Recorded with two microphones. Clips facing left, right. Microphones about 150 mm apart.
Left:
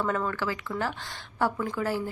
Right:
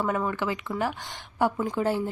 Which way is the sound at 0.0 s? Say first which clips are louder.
Right 1 dB; 15° right (ahead or behind).